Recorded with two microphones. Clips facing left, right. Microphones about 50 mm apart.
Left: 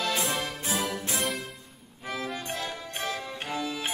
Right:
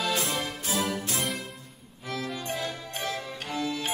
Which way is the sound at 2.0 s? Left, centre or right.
Centre.